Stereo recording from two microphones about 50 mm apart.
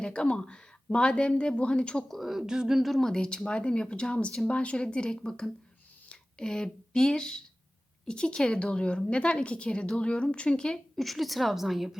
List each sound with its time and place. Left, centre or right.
0.0 s speech: centre
2.0 s speech: centre
3.1 s speech: centre
10.9 s speech: centre